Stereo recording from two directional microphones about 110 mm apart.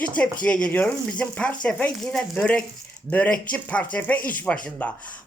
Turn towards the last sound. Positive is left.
turn(degrees=15)  # may be behind; listen again after turning